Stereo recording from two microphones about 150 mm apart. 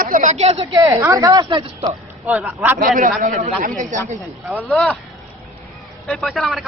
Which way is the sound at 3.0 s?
60° right (ahead or behind).